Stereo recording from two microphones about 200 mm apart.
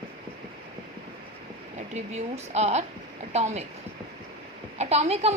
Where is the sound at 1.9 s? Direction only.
35° right (ahead or behind).